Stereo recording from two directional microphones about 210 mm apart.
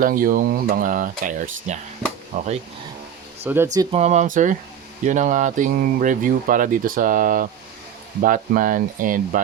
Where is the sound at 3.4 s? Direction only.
10° right (ahead or behind).